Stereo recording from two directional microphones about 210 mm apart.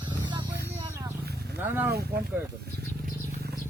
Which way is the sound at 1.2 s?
50° right (ahead or behind).